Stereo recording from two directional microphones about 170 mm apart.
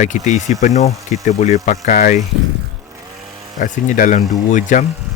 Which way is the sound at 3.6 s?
50° left (ahead or behind).